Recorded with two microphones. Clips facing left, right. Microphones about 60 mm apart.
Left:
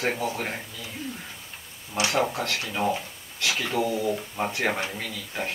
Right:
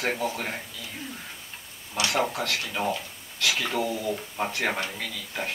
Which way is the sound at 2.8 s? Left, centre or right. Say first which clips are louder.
Left 2 dB; centre.